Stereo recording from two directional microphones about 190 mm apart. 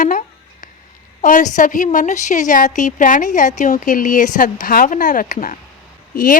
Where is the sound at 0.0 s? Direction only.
45° left (ahead or behind).